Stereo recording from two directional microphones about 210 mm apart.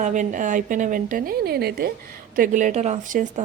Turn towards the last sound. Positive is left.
turn(degrees=-35)  # may be behind; listen again after turning